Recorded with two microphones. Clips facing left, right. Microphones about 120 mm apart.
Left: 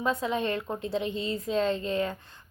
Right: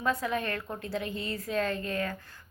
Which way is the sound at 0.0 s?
20° left (ahead or behind).